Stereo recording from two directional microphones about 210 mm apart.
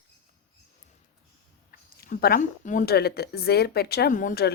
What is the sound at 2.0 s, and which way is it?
A woman's voice, 45° left (ahead or behind).